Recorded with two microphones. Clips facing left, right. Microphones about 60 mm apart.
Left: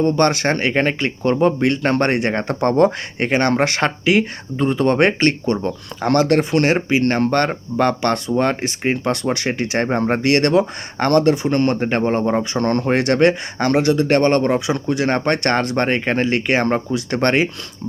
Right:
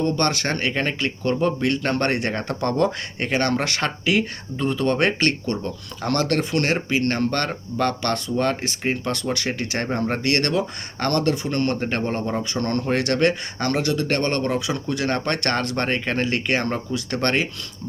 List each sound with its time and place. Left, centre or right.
0.0 s speech: left
0.7 s speech: left
13.0 s speech: left